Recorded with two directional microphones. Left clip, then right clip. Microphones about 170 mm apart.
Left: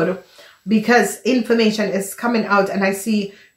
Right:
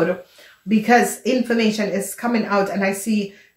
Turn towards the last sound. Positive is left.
turn(degrees=35)  # may be behind; listen again after turning